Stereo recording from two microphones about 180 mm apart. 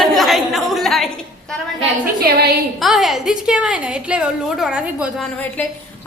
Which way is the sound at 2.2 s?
60° right (ahead or behind).